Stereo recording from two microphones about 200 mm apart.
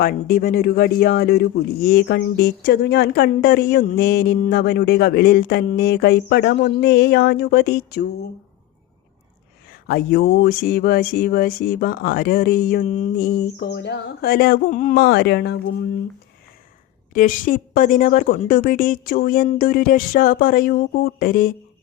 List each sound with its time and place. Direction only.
0.0 s speech: 45° left (ahead or behind)
9.8 s speech: 50° left (ahead or behind)
17.2 s speech: 45° left (ahead or behind)